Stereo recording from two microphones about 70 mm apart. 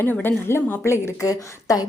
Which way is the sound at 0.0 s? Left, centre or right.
Left.